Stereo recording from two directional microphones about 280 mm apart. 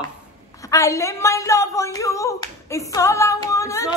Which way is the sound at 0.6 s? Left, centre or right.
Centre.